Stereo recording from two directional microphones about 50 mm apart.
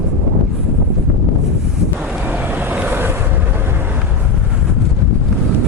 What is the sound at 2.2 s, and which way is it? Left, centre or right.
Vehicle, right.